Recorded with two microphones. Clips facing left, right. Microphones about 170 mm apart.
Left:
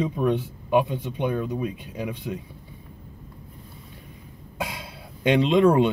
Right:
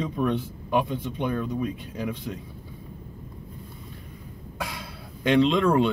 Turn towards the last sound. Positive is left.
turn(degrees=20)  # may be behind; listen again after turning